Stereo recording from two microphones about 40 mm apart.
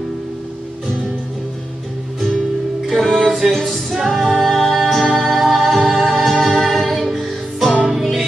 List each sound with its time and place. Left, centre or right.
2.9 s music: centre